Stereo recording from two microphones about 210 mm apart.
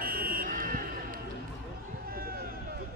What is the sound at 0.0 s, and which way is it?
Buzzer, 45° right (ahead or behind).